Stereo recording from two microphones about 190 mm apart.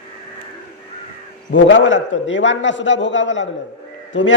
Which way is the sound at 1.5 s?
70° left (ahead or behind).